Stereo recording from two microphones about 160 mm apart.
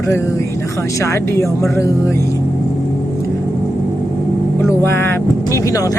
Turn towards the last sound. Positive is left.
turn(degrees=20)  # may be behind; listen again after turning